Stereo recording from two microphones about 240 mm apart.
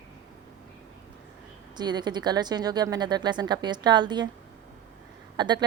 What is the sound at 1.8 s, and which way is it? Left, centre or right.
Speech, centre.